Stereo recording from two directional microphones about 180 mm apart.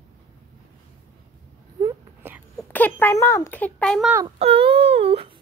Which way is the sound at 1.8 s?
10° right (ahead or behind).